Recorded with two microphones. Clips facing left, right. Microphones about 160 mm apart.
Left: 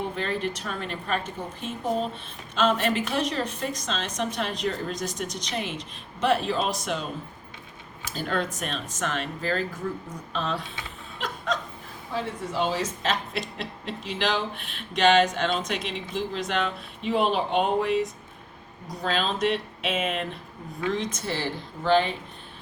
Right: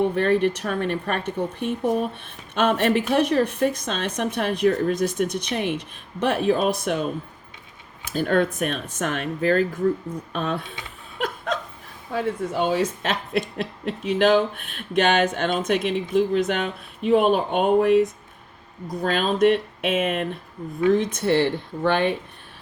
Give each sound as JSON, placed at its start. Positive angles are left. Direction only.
{"t": 0.0, "sound": "a woman's voice", "side_deg": -60}
{"t": 8.1, "sound": "a woman's voice", "side_deg": -50}
{"t": 12.1, "sound": "speech", "side_deg": -55}
{"t": 19.0, "sound": "a woman's voice", "side_deg": -50}